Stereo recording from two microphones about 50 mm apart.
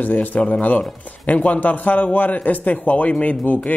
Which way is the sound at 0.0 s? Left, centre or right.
Left.